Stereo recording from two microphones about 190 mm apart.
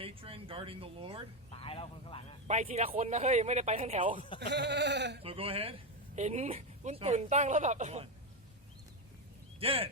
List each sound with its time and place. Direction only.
0.0 s a sound: 30° right (ahead or behind)
1.5 s speech: 30° left (ahead or behind)
2.5 s speech: 35° right (ahead or behind)
4.4 s speech: 65° right (ahead or behind)
5.2 s speech: 30° right (ahead or behind)
9.6 s speech: 30° right (ahead or behind)